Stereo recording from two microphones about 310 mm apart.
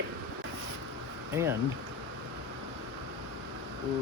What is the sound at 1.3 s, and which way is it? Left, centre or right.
Speech, centre.